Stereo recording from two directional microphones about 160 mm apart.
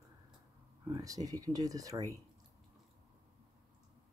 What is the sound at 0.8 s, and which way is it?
Speech, 25° right (ahead or behind).